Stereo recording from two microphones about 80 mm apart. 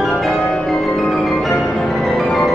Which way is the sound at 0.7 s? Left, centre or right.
Centre.